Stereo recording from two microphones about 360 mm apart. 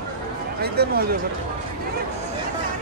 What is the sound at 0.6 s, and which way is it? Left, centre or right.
Speech, right.